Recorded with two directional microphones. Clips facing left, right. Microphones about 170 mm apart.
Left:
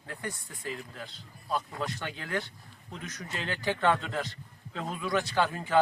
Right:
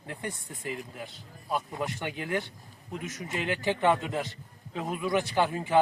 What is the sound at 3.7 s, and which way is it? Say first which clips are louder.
A man's voice: right 1 dB; 10° right (ahead or behind).